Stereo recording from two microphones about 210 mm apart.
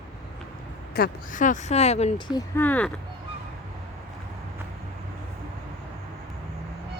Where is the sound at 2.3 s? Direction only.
15° left (ahead or behind).